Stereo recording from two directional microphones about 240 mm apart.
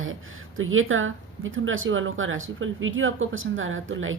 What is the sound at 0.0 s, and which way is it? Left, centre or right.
Speech, right.